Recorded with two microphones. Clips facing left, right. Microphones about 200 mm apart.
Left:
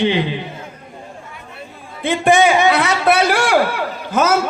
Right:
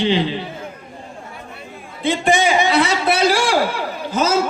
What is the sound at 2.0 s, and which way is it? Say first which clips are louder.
A man's voice: left 3 dB; 55° left (ahead or behind).